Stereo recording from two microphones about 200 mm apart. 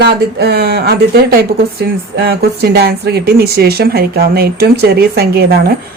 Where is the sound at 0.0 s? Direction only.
55° right (ahead or behind).